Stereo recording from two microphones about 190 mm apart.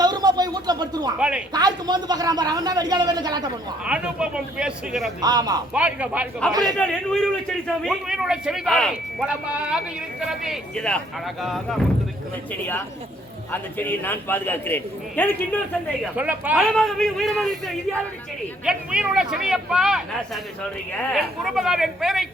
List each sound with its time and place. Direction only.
0.0 s a sound: 20° right (ahead or behind)
1.5 s a man's voice: 20° right (ahead or behind)
3.8 s a man's voice: 5° right (ahead or behind)
5.2 s a man's voice: 20° right (ahead or behind)
5.7 s speech: 5° right (ahead or behind)
6.5 s a man's voice: 20° right (ahead or behind)
6.7 s a man's voice: 5° left (ahead or behind)
13.5 s a man's voice: 10° left (ahead or behind)
16.1 s speech: 10° right (ahead or behind)
16.6 s a man's voice: centre (ahead or behind)